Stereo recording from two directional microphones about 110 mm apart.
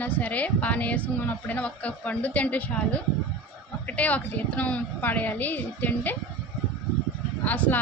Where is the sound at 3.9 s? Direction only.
15° left (ahead or behind).